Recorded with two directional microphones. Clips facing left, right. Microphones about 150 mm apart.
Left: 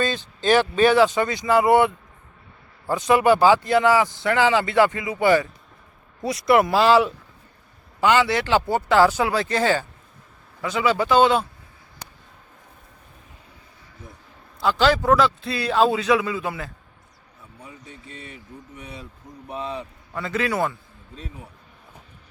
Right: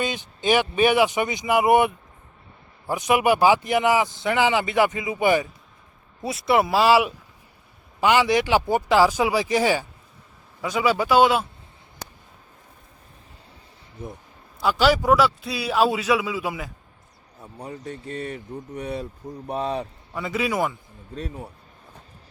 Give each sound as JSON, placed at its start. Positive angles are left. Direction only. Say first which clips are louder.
{"t": 0.0, "sound": "speech", "louder": "left 2 dB", "side_deg": -15}
{"t": 6.3, "sound": "speech", "louder": "left 2 dB", "side_deg": -5}
{"t": 14.6, "sound": "speech", "louder": "even", "side_deg": -10}
{"t": 17.4, "sound": "speech", "louder": "right 9 dB", "side_deg": -45}
{"t": 20.1, "sound": "speech", "louder": "even", "side_deg": -10}
{"t": 21.2, "sound": "speech", "louder": "right 7 dB", "side_deg": -45}